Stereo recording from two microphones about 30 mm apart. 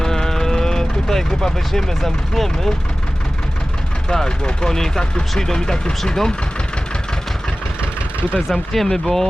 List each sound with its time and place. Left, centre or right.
0.0 s vehicle: centre
4.1 s speech: left
8.4 s speech: centre